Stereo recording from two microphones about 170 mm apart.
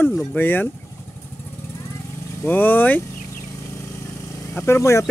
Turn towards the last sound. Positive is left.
turn(degrees=15)  # may be behind; listen again after turning